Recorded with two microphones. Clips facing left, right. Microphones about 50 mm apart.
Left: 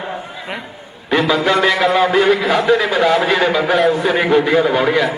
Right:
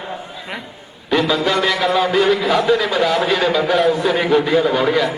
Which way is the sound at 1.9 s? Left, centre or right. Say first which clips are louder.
Left 3 dB; centre.